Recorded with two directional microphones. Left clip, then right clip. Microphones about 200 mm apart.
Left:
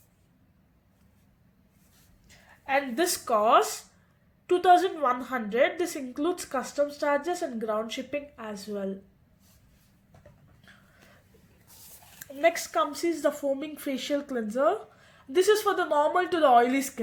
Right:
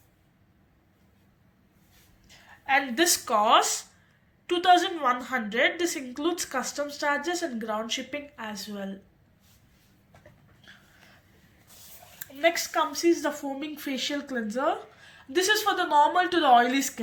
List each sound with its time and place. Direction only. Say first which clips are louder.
2.2 s a woman's voice: right 4 dB; 50° left (ahead or behind)
12.2 s a woman's voice: even; 50° left (ahead or behind)